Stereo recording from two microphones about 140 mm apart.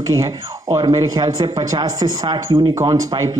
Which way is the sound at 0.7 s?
25° right (ahead or behind).